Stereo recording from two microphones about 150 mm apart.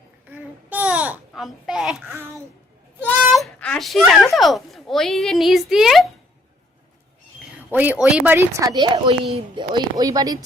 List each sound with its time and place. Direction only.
0.3 s babbling: 10° right (ahead or behind)
1.3 s a child's voice: centre (ahead or behind)
3.3 s a child's voice: 5° left (ahead or behind)
7.7 s speech: 10° right (ahead or behind)